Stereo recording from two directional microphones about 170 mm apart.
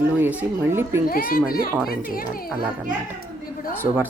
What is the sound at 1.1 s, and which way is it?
Speech, 60° left (ahead or behind).